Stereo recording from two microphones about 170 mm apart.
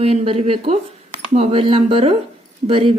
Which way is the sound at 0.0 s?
35° right (ahead or behind).